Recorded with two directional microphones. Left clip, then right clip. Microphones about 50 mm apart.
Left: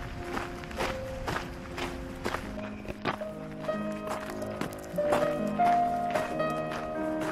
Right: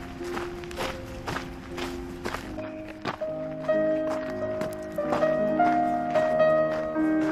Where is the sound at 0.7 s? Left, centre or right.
Centre.